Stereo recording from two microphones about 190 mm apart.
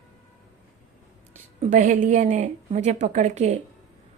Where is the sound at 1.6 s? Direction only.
40° right (ahead or behind).